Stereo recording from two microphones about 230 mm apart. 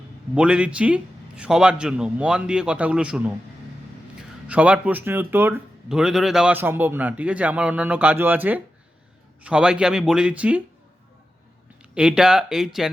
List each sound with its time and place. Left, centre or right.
0.3 s a man's voice: centre
11.9 s a man's voice: centre